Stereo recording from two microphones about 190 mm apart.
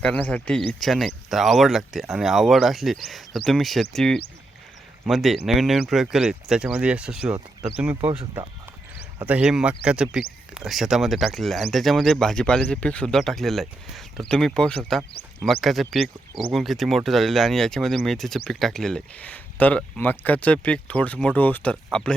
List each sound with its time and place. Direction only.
0.0 s speech: 5° left (ahead or behind)
8.0 s speech: 30° right (ahead or behind)
9.2 s speech: 5° right (ahead or behind)